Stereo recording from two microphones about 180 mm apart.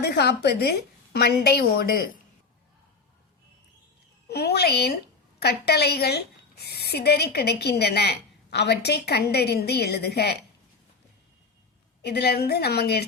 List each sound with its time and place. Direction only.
0.0 s a woman's voice: 65° left (ahead or behind)
4.3 s a woman's voice: 65° left (ahead or behind)
12.0 s a woman's voice: 65° left (ahead or behind)